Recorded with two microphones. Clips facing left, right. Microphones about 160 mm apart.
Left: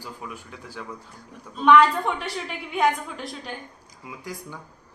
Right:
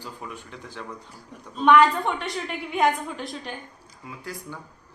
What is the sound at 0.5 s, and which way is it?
A woman's voice, 5° left (ahead or behind).